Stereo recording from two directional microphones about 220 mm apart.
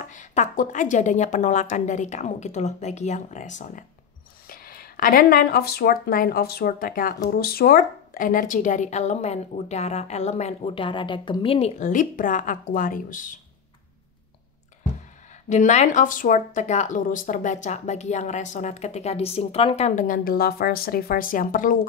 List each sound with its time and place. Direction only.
0.0 s speech: 35° left (ahead or behind)
15.5 s speech: 30° left (ahead or behind)